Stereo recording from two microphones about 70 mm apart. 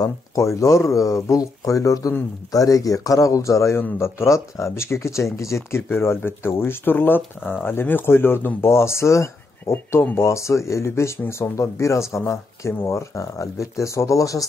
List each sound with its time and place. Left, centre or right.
0.4 s speech: left